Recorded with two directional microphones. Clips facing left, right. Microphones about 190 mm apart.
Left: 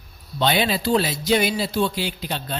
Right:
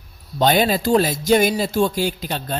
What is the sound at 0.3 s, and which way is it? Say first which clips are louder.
A man's voice: right 4 dB; 45° right (ahead or behind).